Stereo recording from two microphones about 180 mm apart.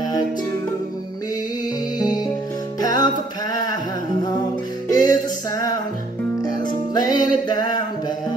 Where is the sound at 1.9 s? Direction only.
20° left (ahead or behind).